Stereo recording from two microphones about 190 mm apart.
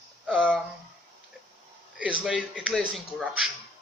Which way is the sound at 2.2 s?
Centre (ahead or behind).